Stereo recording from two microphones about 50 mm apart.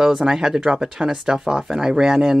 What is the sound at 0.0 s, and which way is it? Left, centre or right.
Speech, centre.